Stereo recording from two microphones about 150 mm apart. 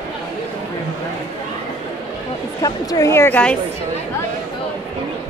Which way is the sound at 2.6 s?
25° left (ahead or behind).